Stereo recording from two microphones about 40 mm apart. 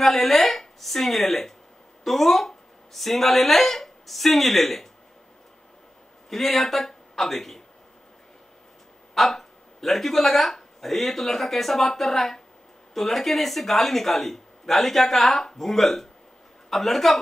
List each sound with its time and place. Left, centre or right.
0.0 s speech: centre
6.3 s speech: centre
6.9 s a sound: centre
9.1 s speech: centre